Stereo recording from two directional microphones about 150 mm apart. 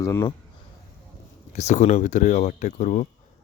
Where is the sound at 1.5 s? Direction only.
50° left (ahead or behind).